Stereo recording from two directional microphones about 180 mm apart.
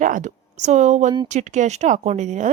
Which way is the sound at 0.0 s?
45° right (ahead or behind).